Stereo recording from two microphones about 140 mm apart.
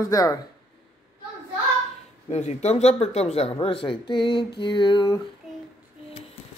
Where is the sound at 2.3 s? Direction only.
50° left (ahead or behind); by 5.2 s 35° left (ahead or behind).